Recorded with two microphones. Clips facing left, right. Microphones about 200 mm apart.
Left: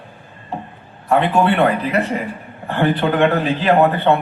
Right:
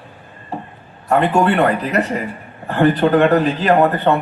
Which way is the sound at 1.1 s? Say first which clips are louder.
Right 1 dB; 40° right (ahead or behind).